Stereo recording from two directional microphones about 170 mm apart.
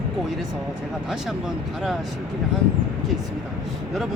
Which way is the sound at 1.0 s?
Centre (ahead or behind).